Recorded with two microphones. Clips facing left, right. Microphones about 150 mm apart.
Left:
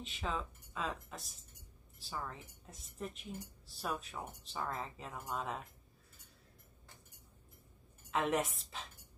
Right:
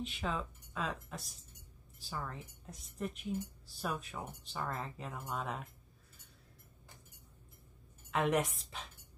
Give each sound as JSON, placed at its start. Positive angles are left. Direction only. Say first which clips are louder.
{"t": 0.0, "sound": "speech", "louder": "right 2 dB", "side_deg": 0}
{"t": 8.1, "sound": "speech", "louder": "right 2 dB", "side_deg": 0}